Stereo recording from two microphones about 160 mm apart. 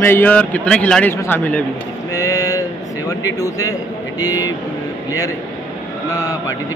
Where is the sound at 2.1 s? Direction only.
20° left (ahead or behind).